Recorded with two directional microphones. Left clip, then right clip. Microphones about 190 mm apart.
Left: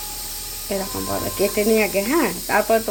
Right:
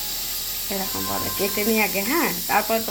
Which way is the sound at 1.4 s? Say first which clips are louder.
Left 5 dB; 50° left (ahead or behind).